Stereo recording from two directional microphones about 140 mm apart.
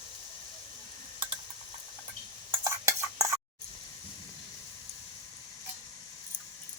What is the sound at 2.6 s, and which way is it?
Stir, 20° right (ahead or behind).